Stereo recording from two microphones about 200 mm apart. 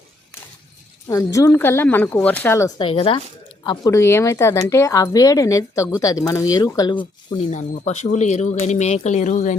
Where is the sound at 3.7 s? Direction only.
15° left (ahead or behind).